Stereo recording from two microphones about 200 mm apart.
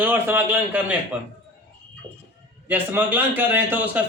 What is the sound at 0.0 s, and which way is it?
Speech, 10° right (ahead or behind).